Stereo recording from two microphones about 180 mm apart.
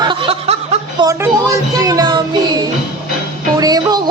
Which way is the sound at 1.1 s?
15° right (ahead or behind).